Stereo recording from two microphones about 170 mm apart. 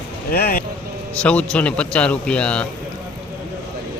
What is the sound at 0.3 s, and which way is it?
Speech, 60° left (ahead or behind).